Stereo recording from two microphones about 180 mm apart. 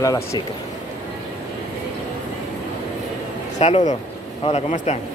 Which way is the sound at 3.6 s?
40° left (ahead or behind).